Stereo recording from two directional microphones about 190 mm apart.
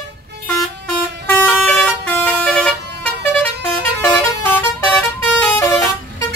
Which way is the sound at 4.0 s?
10° left (ahead or behind).